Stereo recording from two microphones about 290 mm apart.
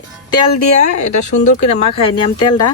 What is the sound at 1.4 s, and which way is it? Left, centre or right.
Speech, left.